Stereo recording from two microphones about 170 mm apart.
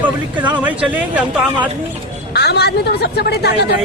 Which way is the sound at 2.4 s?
75° left (ahead or behind).